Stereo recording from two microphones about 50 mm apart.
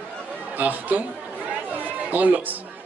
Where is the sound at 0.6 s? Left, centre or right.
Right.